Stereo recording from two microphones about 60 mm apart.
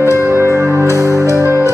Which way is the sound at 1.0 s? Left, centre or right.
Right.